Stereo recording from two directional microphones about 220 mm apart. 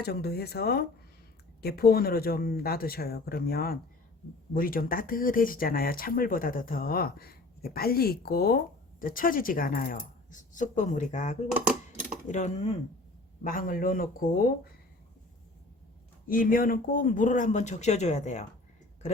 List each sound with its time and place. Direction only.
0.0 s speech: 45° left (ahead or behind)
16.3 s speech: 40° left (ahead or behind)